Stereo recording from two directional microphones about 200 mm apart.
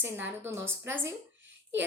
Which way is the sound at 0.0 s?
10° right (ahead or behind).